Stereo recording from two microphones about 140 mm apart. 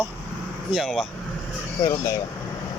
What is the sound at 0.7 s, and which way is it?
Speech, centre (ahead or behind).